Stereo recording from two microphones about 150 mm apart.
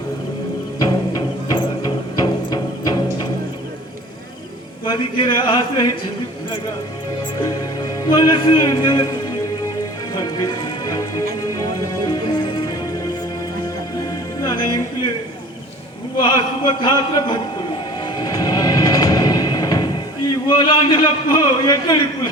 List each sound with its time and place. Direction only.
0.8 s music: 25° left (ahead or behind)
4.9 s a man's voice: 30° left (ahead or behind)
7.9 s a man's voice: 25° left (ahead or behind)
10.2 s music: 25° left (ahead or behind)
14.4 s music: 30° left (ahead or behind)
16.2 s speech: 30° left (ahead or behind)
18.0 s music: 25° left (ahead or behind)
20.6 s a man's voice: 30° left (ahead or behind)